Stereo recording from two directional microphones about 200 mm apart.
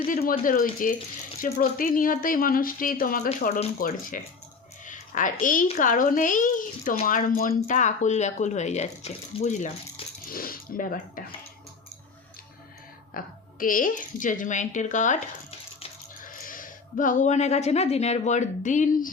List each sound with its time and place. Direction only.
0.1 s a child's voice: 45° left (ahead or behind)
10.2 s speech: 45° left (ahead or behind)
13.1 s a child's voice: 45° left (ahead or behind)
16.2 s speech: 45° left (ahead or behind)